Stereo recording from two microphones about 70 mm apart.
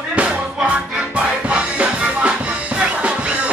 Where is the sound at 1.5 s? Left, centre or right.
Centre.